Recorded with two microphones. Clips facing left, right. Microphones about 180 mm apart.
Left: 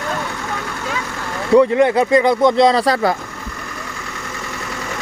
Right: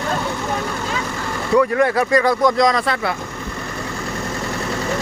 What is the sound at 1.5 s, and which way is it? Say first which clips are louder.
Speech: left 4 dB; 20° left (ahead or behind).